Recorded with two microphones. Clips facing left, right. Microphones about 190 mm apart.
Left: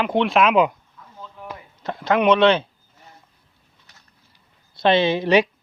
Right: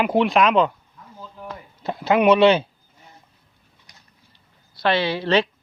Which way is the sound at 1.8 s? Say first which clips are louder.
Right 1 dB; 10° right (ahead or behind).